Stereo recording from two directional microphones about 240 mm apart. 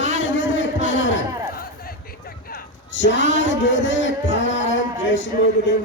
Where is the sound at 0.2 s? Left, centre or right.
Left.